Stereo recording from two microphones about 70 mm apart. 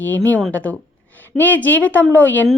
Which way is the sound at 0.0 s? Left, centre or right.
Left.